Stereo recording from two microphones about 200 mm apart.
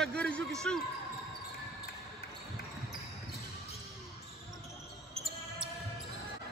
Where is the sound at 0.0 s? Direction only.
5° left (ahead or behind).